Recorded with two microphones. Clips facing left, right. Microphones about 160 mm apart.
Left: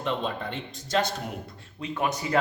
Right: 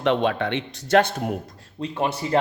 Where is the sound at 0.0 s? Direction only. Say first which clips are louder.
Right 8 dB; 80° right.